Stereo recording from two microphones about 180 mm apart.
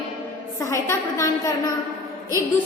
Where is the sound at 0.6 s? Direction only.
15° left (ahead or behind).